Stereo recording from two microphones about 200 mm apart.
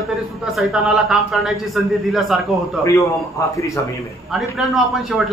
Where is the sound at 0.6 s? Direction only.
5° right (ahead or behind).